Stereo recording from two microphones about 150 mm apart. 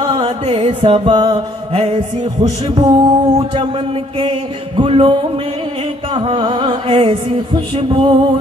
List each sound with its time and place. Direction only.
0.0 s music: 35° right (ahead or behind)
6.1 s music: 35° right (ahead or behind)